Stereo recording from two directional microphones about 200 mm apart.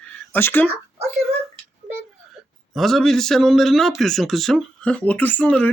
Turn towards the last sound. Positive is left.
turn(degrees=5)  # may be behind; listen again after turning